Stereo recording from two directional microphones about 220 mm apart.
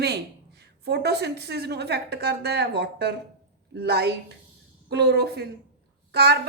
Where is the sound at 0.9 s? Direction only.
50° right (ahead or behind).